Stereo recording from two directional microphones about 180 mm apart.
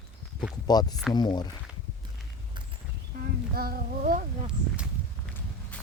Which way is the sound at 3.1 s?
50° right (ahead or behind).